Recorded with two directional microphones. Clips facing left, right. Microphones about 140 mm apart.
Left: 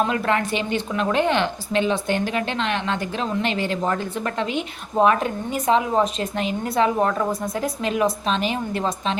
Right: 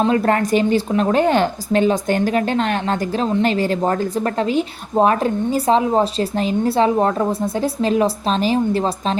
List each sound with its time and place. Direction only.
0.0 s a woman's voice: 35° right (ahead or behind)